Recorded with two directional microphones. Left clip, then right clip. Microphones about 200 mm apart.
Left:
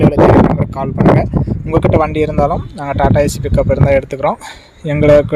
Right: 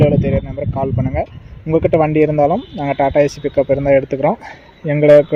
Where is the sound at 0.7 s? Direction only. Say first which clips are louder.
Left 8 dB; 5° left (ahead or behind).